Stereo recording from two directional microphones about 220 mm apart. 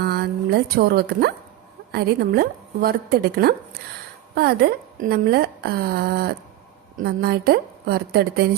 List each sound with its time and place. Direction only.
0.0 s a woman's voice: 45° right (ahead or behind)